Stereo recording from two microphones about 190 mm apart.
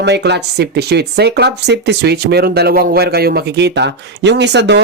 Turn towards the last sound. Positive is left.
turn(degrees=-65)  # may be behind; listen again after turning